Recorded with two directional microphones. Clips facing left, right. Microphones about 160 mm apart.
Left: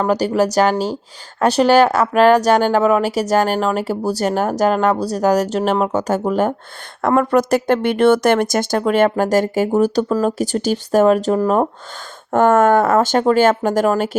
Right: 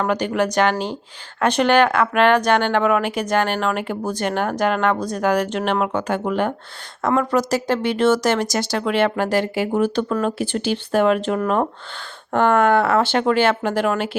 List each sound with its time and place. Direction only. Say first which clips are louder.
0.0 s speech: left 4 dB; 35° left (ahead or behind)
7.0 s speech: left 4 dB; 55° left (ahead or behind); by 11.7 s 30° left (ahead or behind)
12.3 s speech: left 4 dB; 45° left (ahead or behind)